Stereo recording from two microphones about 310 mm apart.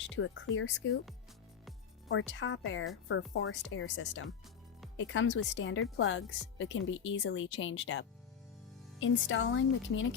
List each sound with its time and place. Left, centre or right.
0.2 s speech: left
2.0 s speech: left